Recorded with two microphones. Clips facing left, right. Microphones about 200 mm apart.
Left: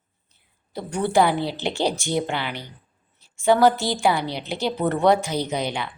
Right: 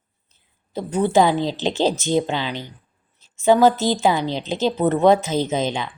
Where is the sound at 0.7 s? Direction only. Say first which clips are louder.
Right 3 dB; 20° right (ahead or behind).